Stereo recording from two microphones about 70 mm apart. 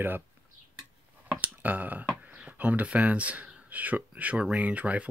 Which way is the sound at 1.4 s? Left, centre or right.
Right.